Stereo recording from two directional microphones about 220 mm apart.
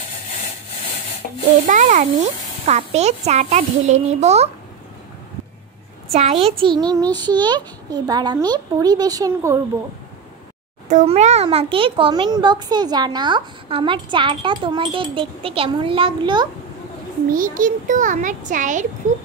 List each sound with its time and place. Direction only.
1.7 s a child's voice: 35° right (ahead or behind)
6.1 s a child's voice: 25° right (ahead or behind)
10.9 s a child's voice: 30° right (ahead or behind)
17.3 s a child's voice: 40° right (ahead or behind)